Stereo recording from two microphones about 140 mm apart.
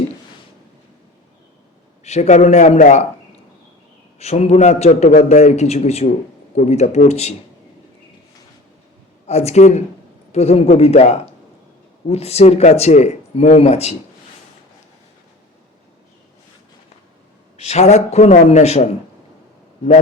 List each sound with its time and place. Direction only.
2.0 s a man's voice: 55° left (ahead or behind)
4.2 s a man's voice: 50° left (ahead or behind)
9.2 s a man's voice: 50° left (ahead or behind)
17.6 s a man's voice: 50° left (ahead or behind)